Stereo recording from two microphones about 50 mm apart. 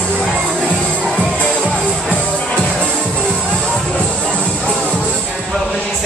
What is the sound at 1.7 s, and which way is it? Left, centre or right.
Music, centre.